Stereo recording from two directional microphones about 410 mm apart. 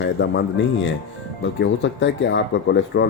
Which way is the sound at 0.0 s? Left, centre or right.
Left.